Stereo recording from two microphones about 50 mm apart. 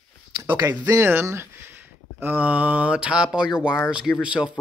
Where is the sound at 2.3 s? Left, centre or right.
Right.